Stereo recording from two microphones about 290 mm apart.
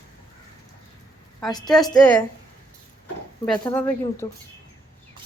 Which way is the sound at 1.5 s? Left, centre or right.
Centre.